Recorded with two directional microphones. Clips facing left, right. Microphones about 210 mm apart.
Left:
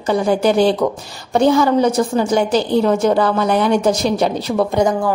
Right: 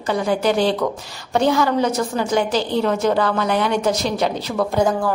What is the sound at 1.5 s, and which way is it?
A woman's voice, 25° left (ahead or behind).